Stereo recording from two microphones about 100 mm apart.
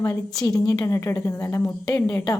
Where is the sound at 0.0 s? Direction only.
35° left (ahead or behind).